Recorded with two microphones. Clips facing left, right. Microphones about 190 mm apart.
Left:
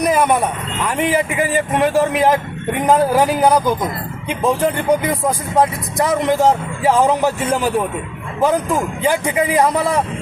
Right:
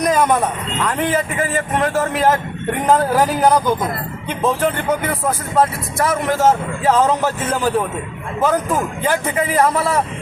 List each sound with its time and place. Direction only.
0.0 s vehicle: 10° left (ahead or behind)
0.9 s speech: 10° left (ahead or behind)
9.0 s speech: 15° left (ahead or behind)